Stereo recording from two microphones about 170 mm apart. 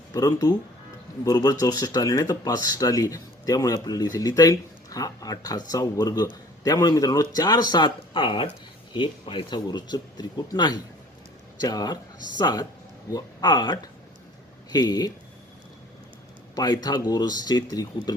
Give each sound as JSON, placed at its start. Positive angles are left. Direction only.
{"t": 0.1, "sound": "speech", "side_deg": 20}
{"t": 16.6, "sound": "speech", "side_deg": 25}